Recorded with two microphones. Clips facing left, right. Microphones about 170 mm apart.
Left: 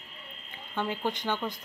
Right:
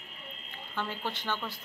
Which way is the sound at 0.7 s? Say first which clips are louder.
Left 5 dB; 15° left (ahead or behind).